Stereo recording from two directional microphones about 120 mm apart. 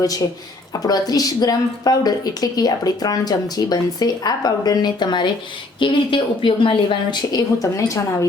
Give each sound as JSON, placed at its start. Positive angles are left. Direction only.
{"t": 0.0, "sound": "a woman's voice", "side_deg": 30}